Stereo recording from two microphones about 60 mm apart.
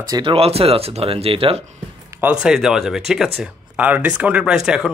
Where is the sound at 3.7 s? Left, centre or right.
Right; by 4.9 s centre.